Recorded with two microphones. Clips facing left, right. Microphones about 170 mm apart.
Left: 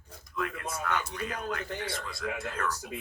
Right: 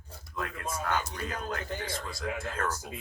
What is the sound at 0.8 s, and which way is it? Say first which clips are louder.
Speech: even; 35° right (ahead or behind).